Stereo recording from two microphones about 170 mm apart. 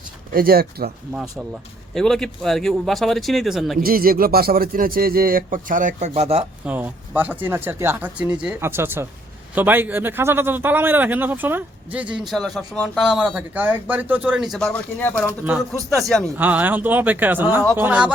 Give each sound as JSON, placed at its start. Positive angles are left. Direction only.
{"t": 0.3, "sound": "speech", "side_deg": -60}
{"t": 1.1, "sound": "speech", "side_deg": -5}
{"t": 3.8, "sound": "speech", "side_deg": -60}
{"t": 6.7, "sound": "speech", "side_deg": -10}
{"t": 16.4, "sound": "speech", "side_deg": -10}